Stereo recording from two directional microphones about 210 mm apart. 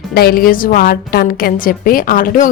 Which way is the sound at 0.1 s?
45° left (ahead or behind).